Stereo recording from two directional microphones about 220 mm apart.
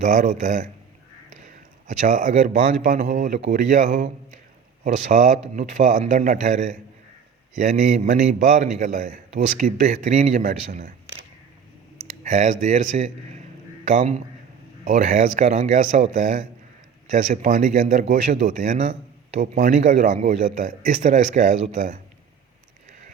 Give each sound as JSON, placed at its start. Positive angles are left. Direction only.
{"t": 0.0, "sound": "a man's voice", "side_deg": -35}
{"t": 1.9, "sound": "a man's voice", "side_deg": -35}
{"t": 12.2, "sound": "a man's voice", "side_deg": -35}
{"t": 22.9, "sound": "a sound", "side_deg": -35}